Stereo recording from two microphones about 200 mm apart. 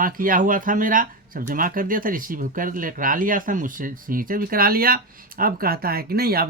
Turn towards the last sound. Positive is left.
turn(degrees=-50)  # may be behind; listen again after turning